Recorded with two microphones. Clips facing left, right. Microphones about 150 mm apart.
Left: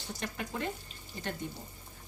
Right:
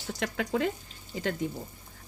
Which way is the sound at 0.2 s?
90° right.